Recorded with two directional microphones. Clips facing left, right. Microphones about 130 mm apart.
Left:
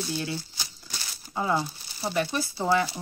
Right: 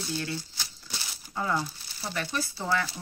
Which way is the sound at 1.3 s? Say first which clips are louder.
Left 3 dB; 20° left (ahead or behind).